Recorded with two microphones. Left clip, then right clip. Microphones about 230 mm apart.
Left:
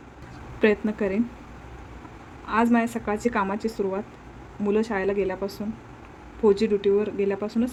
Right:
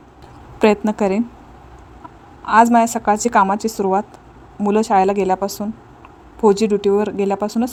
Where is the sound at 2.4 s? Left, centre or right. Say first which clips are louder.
Right 11 dB; right.